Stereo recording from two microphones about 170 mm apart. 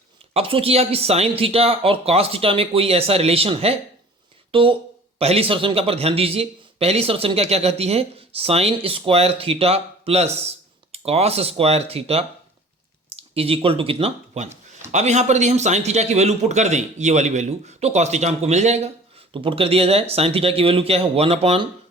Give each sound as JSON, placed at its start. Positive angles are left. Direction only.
{"t": 0.3, "sound": "speech", "side_deg": -35}
{"t": 19.3, "sound": "speech", "side_deg": -30}